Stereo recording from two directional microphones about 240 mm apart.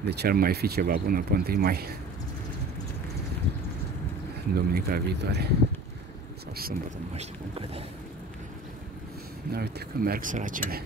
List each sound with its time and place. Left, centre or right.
0.0 s speech: right
4.6 s speech: right
7.2 s speech: right
9.5 s speech: right